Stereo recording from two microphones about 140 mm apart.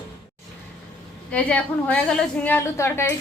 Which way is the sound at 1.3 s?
10° left (ahead or behind).